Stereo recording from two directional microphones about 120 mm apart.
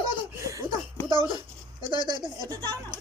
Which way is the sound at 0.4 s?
30° right (ahead or behind).